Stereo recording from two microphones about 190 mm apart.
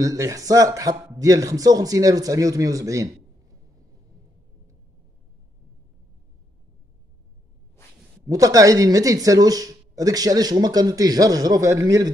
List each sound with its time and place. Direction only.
0.0 s speech: 15° right (ahead or behind)
8.3 s speech: 20° right (ahead or behind)